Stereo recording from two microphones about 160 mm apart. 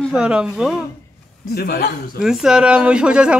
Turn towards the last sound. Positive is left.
turn(degrees=-5)  # may be behind; listen again after turning